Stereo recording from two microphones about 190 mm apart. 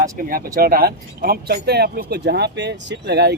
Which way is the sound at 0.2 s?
50° right (ahead or behind).